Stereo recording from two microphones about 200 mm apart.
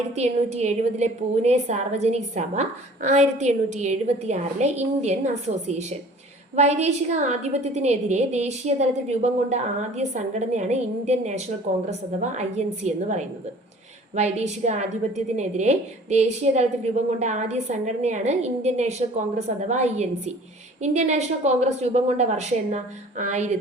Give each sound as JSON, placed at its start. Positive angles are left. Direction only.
{"t": 0.2, "sound": "a woman's voice", "side_deg": -35}